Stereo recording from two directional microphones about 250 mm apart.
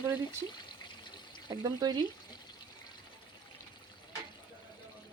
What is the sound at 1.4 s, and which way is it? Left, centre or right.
Speech, centre.